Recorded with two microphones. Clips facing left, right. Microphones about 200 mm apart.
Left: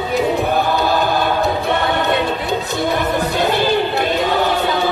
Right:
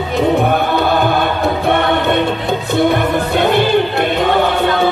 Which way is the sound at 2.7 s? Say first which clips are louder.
Right 7 dB; 60° right (ahead or behind).